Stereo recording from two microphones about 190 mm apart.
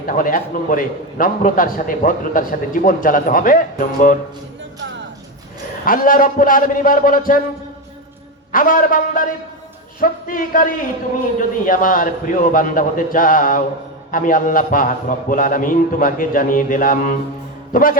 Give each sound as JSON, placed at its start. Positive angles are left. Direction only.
{"t": 0.0, "sound": "a man's voice", "side_deg": 45}
{"t": 5.8, "sound": "a man's voice", "side_deg": 45}
{"t": 8.5, "sound": "a man's voice", "side_deg": 45}